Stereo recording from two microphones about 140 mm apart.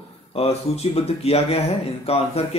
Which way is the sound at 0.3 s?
45° left (ahead or behind).